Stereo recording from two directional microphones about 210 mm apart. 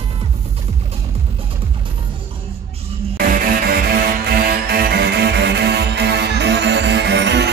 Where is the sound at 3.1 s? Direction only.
45° right (ahead or behind).